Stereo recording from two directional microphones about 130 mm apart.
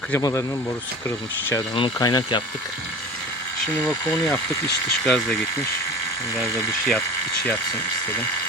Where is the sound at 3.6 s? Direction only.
10° left (ahead or behind).